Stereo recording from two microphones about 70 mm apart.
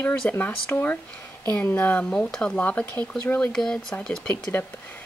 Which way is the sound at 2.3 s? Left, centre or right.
Centre.